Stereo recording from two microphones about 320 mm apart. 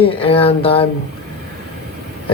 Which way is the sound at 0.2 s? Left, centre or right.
Centre.